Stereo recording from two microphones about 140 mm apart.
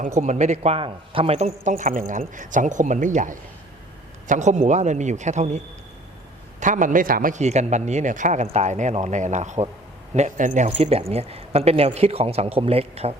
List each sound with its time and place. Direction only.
0.2 s a man's voice: 55° right (ahead or behind)
6.6 s a man's voice: 65° right (ahead or behind)
10.7 s speech: 45° right (ahead or behind)